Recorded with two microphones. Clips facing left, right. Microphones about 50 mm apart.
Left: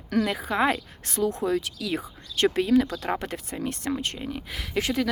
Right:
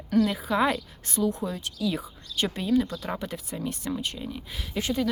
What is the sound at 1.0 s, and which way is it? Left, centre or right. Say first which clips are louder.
Speech: left 2 dB; left.